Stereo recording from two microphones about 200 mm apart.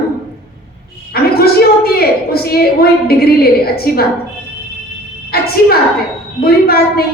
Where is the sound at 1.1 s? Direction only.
50° left (ahead or behind).